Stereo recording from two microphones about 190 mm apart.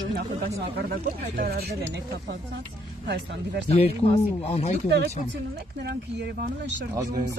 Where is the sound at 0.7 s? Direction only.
50° right (ahead or behind).